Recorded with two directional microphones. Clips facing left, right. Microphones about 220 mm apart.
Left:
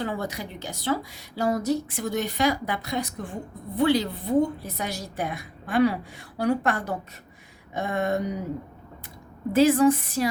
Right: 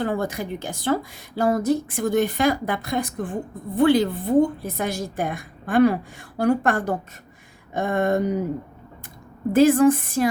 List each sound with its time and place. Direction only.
0.0 s a woman's voice: 50° right (ahead or behind)
9.5 s a woman's voice: 50° right (ahead or behind)